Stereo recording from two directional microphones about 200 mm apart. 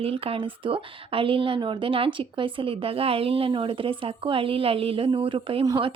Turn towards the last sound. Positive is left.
turn(degrees=-20)  # may be behind; listen again after turning